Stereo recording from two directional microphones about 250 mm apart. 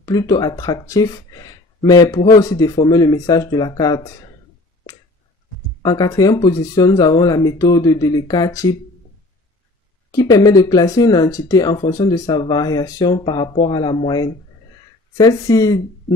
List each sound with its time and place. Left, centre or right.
0.0 s speech: centre
5.8 s speech: centre
10.1 s speech: centre